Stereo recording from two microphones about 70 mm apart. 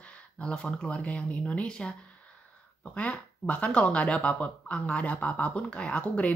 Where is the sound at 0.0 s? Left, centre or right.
Centre.